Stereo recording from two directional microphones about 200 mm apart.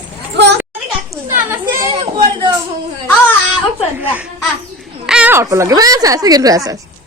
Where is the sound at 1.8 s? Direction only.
25° right (ahead or behind).